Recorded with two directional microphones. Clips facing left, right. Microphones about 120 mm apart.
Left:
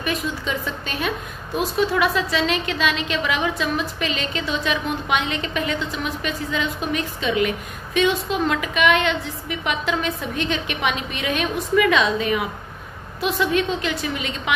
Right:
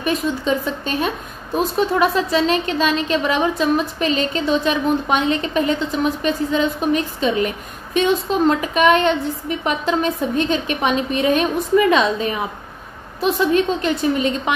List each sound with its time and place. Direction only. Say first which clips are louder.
0.0 s a woman's voice: right 5 dB; 35° right (ahead or behind)